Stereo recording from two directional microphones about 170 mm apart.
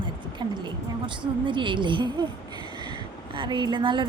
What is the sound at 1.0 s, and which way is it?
A woman's voice, 30° right (ahead or behind).